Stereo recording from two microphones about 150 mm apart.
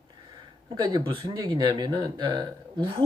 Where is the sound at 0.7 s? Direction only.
30° right (ahead or behind).